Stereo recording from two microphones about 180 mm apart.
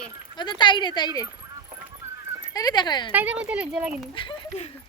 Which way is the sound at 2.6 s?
20° left (ahead or behind).